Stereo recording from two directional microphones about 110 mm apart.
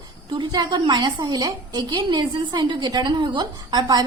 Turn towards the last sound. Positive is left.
turn(degrees=-40)  # may be behind; listen again after turning